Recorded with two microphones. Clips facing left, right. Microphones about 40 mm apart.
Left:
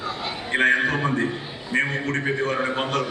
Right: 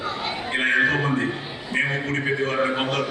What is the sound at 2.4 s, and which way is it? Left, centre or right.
Speech, centre.